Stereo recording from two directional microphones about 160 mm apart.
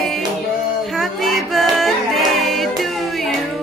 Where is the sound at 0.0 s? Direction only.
Centre (ahead or behind).